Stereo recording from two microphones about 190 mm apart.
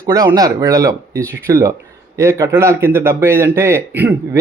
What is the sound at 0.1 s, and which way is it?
Speech, 20° right (ahead or behind).